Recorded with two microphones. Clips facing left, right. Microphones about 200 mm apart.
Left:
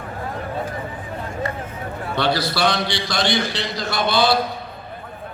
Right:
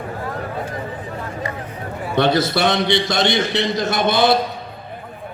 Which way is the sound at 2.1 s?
20° right (ahead or behind).